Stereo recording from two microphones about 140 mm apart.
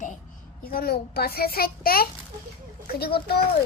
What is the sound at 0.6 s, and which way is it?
A child's voice, 90° left.